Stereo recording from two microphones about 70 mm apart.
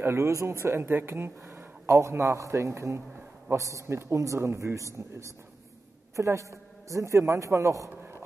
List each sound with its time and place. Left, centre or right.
0.0 s a man's voice: right